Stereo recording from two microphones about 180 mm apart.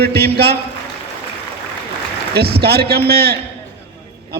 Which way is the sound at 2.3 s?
60° right (ahead or behind).